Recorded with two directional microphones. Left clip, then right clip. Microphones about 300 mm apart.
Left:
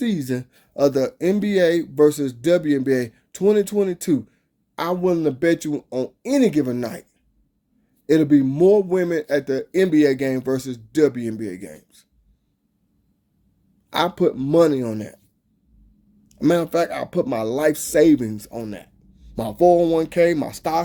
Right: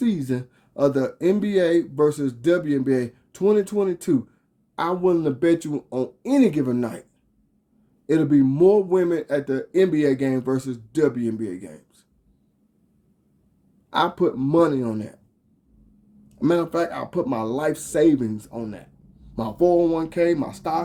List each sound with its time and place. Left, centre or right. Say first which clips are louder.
0.0 s speech: left 1 dB; left
8.0 s speech: left 2 dB; left
13.9 s speech: left 1 dB; left
16.4 s speech: left 3 dB; left